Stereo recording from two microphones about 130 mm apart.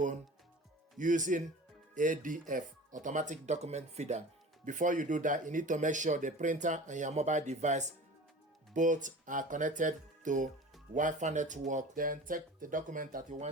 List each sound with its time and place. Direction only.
0.9 s speech: 80° right
2.0 s speech: 90° right; by 4.2 s 60° right (ahead or behind)
4.6 s speech: 75° right (ahead or behind)
8.7 s speech: 75° right (ahead or behind)